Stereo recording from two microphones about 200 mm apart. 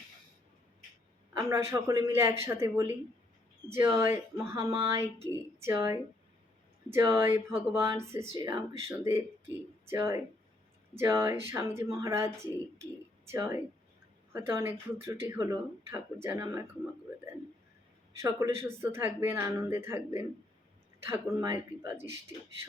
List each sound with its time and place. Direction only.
1.3 s speech: 15° right (ahead or behind)
7.2 s speech: 10° right (ahead or behind)
13.3 s speech: 15° right (ahead or behind)
18.2 s speech: 15° right (ahead or behind)
21.1 s speech: 15° right (ahead or behind)